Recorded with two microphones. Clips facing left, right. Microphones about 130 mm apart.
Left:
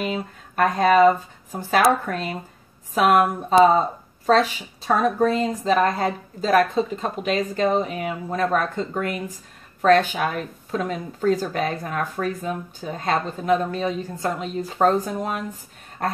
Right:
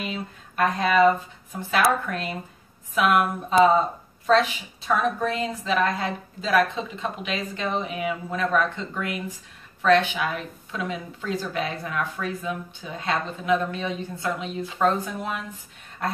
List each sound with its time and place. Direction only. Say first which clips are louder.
0.0 s speech: left 5 dB; 45° left (ahead or behind)